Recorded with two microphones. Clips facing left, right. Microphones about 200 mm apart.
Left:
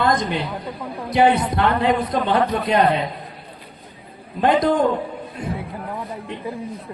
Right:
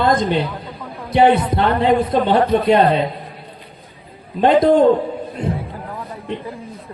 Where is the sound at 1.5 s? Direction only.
25° right (ahead or behind).